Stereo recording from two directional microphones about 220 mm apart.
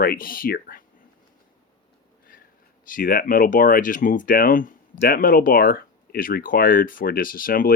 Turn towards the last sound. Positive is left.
turn(degrees=40)  # may be behind; listen again after turning